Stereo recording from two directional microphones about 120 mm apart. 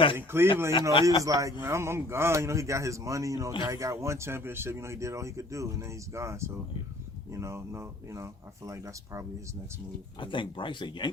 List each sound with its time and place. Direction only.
0.2 s speech: 20° right (ahead or behind)
10.2 s speech: 45° left (ahead or behind)